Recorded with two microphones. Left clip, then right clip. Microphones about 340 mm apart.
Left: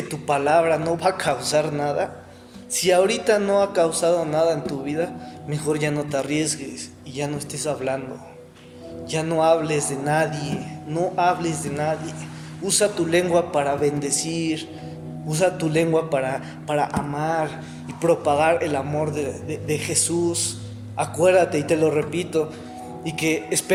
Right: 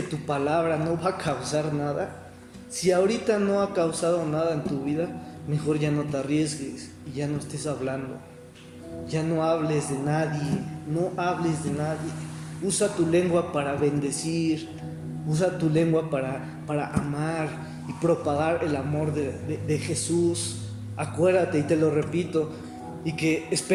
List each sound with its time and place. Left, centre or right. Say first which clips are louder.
0.1 s speech: left 8 dB; left
9.4 s speech: left 7 dB; left